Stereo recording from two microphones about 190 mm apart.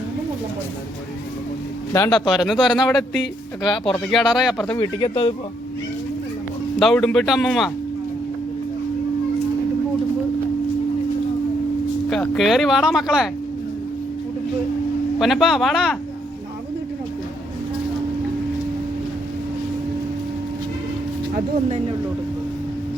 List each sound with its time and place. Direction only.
2.1 s speech: centre (ahead or behind)
4.1 s speech: centre (ahead or behind)
4.8 s speech: 25° left (ahead or behind)
6.7 s speech: centre (ahead or behind)
12.0 s speech: 5° left (ahead or behind)
15.2 s speech: centre (ahead or behind)